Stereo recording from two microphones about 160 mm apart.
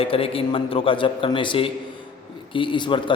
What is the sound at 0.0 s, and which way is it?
A man's voice, 35° left (ahead or behind).